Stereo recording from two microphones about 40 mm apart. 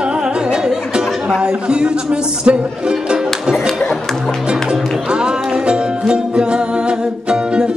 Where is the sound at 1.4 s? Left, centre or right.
Right.